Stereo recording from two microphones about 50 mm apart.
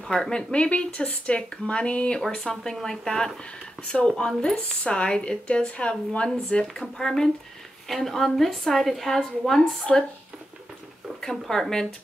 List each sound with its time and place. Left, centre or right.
0.1 s speech: centre
2.2 s speech: centre
6.6 s a woman's voice: centre
11.1 s speech: centre